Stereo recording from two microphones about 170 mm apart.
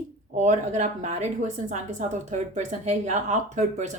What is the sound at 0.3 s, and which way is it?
Speech, 45° right (ahead or behind).